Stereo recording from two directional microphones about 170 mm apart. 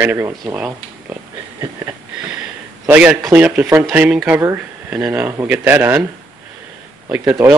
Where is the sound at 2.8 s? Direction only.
10° right (ahead or behind).